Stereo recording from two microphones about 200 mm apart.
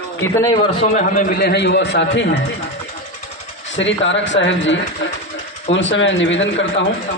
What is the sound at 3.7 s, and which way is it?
Speech, 65° left (ahead or behind).